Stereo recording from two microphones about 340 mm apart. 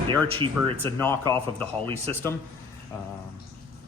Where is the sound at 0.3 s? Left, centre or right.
Centre.